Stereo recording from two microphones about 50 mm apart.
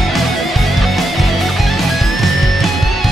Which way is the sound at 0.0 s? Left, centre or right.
Centre.